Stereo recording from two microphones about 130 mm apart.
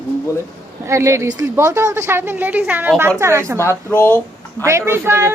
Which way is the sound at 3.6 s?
20° left (ahead or behind).